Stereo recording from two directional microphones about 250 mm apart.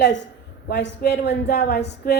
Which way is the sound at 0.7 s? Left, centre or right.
Left.